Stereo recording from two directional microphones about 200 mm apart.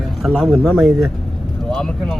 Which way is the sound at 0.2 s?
Centre (ahead or behind).